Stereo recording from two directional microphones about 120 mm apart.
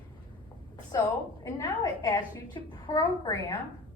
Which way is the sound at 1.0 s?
25° left (ahead or behind).